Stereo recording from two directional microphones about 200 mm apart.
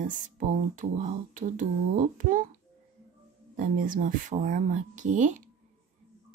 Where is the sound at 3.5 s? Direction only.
40° right (ahead or behind).